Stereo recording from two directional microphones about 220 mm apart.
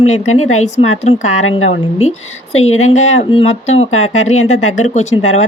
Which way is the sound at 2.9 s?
30° left (ahead or behind).